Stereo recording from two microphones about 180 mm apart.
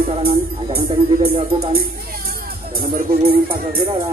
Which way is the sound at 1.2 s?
30° right (ahead or behind).